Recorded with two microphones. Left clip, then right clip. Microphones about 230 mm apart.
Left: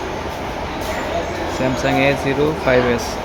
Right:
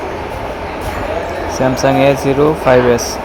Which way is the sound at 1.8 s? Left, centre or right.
Centre.